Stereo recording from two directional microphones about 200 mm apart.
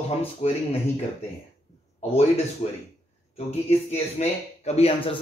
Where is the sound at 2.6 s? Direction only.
35° left (ahead or behind).